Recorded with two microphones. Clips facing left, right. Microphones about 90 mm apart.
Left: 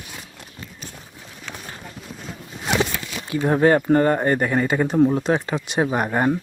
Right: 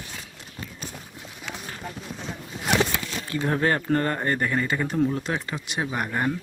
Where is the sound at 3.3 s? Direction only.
20° left (ahead or behind).